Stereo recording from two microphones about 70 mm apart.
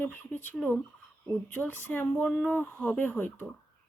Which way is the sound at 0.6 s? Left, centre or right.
Centre.